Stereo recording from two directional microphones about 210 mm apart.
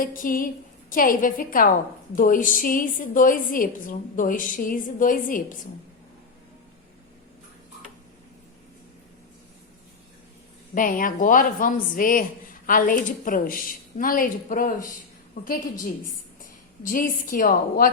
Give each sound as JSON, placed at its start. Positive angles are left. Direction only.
{"t": 0.0, "sound": "speech", "side_deg": 40}
{"t": 10.8, "sound": "speech", "side_deg": 40}
{"t": 16.8, "sound": "speech", "side_deg": 40}